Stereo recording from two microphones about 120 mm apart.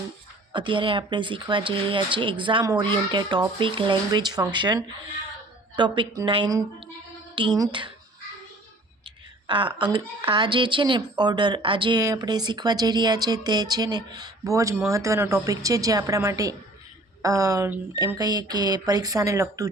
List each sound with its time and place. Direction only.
0.5 s speech: 45° right (ahead or behind)
9.5 s a woman's voice: 45° right (ahead or behind); by 19.6 s 25° right (ahead or behind)